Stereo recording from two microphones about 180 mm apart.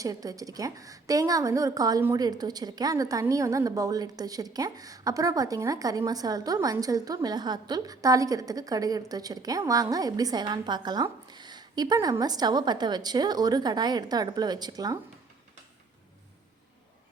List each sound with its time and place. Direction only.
0.0 s a woman's voice: 20° right (ahead or behind)